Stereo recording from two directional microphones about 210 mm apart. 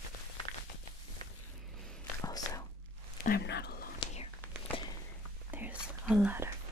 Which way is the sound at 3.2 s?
50° left (ahead or behind).